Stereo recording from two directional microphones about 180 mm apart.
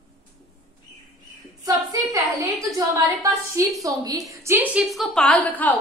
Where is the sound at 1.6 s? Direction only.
20° right (ahead or behind).